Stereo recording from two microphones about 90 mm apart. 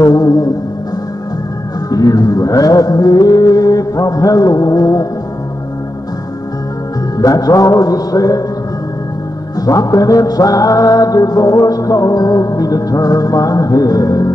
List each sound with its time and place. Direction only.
0.0 s a sound: 45° left (ahead or behind)
1.9 s music: 45° left (ahead or behind)
7.2 s music: 40° left (ahead or behind)
9.6 s music: 45° left (ahead or behind)